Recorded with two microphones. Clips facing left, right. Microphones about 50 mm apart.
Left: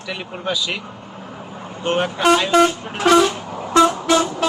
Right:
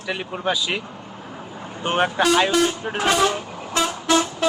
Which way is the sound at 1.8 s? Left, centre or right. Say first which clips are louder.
Left 2 dB; right.